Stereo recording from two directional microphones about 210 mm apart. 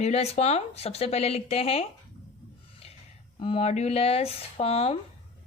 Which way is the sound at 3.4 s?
25° left (ahead or behind).